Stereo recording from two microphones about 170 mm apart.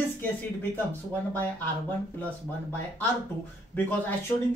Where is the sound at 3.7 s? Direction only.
10° left (ahead or behind).